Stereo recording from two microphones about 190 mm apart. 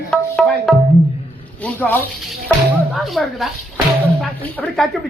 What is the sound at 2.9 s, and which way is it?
A man's voice, centre (ahead or behind).